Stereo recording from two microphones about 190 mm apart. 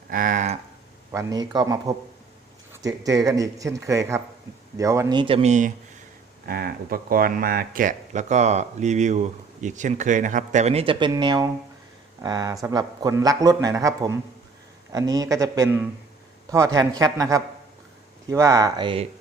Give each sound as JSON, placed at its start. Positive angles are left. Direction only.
{"t": 0.1, "sound": "a sound", "side_deg": -45}
{"t": 1.1, "sound": "a man's voice", "side_deg": -20}
{"t": 6.4, "sound": "a man's voice", "side_deg": -50}